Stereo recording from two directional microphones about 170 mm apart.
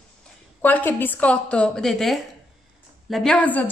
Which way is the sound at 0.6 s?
10° left (ahead or behind).